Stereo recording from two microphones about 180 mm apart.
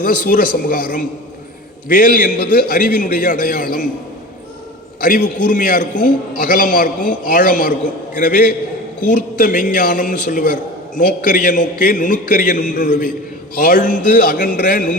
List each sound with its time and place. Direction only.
0.0 s a man's voice: 50° left (ahead or behind)
5.0 s a man's voice: 50° left (ahead or behind)